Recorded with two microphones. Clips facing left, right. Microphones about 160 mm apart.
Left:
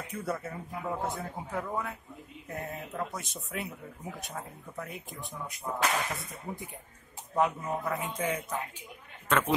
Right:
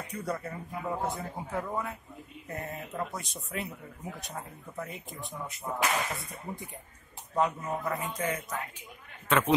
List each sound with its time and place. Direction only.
0.2 s speech: 5° left (ahead or behind)
8.2 s speech: 10° left (ahead or behind)